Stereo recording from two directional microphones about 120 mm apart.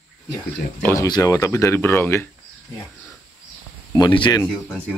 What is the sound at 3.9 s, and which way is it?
Speech, 40° left (ahead or behind).